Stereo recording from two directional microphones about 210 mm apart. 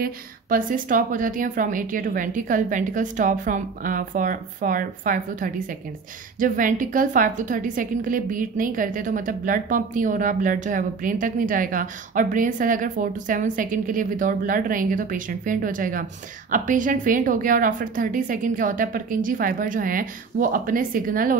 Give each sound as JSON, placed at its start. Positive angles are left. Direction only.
{"t": 0.0, "sound": "a woman's voice", "side_deg": -40}